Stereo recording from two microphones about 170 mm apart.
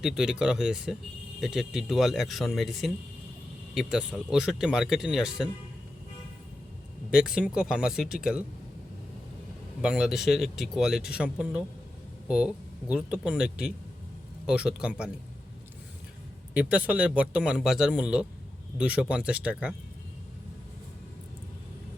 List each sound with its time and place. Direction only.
0.0 s speech: 5° right (ahead or behind)
7.1 s speech: 5° right (ahead or behind)
9.8 s speech: 5° right (ahead or behind)
16.6 s speech: 10° right (ahead or behind)